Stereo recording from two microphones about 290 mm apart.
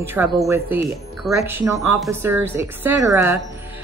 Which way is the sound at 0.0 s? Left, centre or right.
Centre.